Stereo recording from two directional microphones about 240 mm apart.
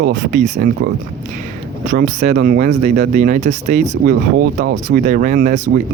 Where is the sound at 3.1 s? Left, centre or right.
Right.